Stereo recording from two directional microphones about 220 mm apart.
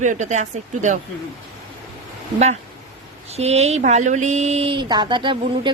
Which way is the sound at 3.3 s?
30° right (ahead or behind).